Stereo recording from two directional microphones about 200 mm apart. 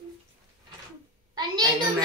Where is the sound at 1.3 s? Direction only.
20° right (ahead or behind).